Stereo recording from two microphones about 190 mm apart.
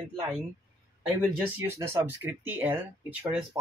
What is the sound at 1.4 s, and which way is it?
Speech, 15° right (ahead or behind).